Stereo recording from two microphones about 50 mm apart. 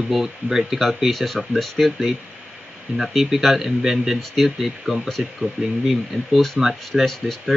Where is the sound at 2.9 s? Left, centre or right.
Centre.